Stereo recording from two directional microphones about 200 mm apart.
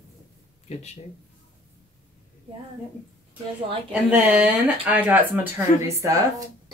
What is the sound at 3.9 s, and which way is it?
Speech, 5° right (ahead or behind).